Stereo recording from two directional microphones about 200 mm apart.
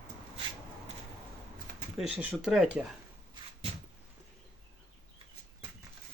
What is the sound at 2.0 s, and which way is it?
Speech, 5° right (ahead or behind).